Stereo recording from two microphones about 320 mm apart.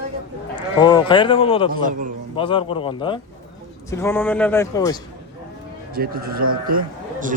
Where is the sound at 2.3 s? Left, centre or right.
Centre.